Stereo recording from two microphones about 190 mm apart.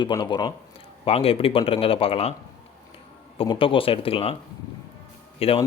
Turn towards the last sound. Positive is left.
turn(degrees=30)  # may be behind; listen again after turning